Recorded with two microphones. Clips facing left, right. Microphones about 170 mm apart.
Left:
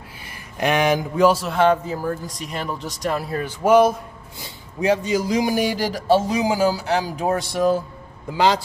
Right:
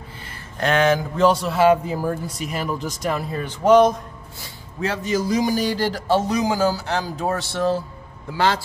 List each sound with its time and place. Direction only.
0.6 s a man's voice: 15° left (ahead or behind)